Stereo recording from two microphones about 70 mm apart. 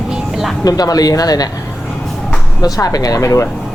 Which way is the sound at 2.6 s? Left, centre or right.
Left.